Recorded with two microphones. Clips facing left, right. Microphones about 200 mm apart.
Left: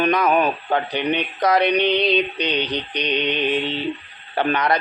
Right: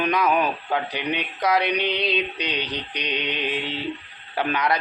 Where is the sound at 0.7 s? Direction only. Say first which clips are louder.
Left 4 dB; 5° right (ahead or behind).